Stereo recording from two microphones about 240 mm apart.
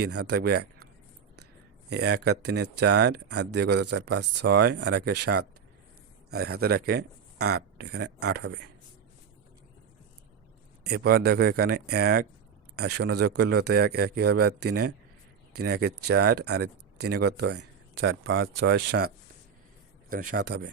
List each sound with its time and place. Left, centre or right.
0.3 s speech: right
1.9 s speech: right
10.8 s a man's voice: right